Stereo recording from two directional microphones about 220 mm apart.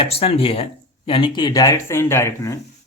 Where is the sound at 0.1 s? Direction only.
25° left (ahead or behind).